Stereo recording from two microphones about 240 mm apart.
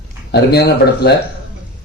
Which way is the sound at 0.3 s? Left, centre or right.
Left.